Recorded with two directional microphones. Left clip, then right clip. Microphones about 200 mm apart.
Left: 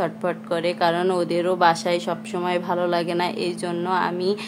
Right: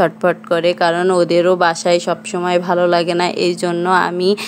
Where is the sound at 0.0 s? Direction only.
30° right (ahead or behind).